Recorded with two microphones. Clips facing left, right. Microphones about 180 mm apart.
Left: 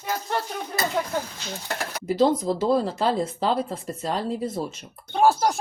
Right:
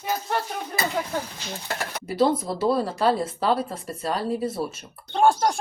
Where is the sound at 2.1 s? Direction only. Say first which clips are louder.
Left 1 dB; 20° left (ahead or behind).